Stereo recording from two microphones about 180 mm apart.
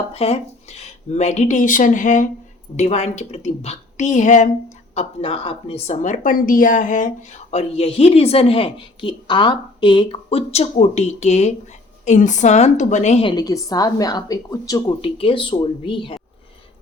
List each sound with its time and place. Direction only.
0.1 s a woman's voice: 35° left (ahead or behind)
4.9 s a woman's voice: 30° left (ahead or behind)
13.2 s a woman's voice: 20° left (ahead or behind)
15.0 s a woman's voice: 30° left (ahead or behind)